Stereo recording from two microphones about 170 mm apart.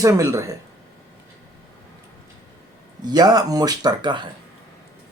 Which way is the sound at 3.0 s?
25° right (ahead or behind).